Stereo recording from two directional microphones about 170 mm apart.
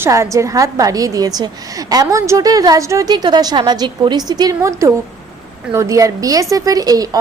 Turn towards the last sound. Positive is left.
turn(degrees=-20)  # may be behind; listen again after turning